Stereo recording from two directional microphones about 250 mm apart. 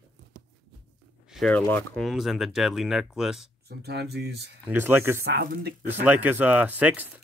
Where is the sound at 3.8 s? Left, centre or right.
Right.